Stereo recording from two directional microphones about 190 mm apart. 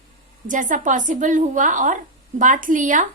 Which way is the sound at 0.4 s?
40° right (ahead or behind).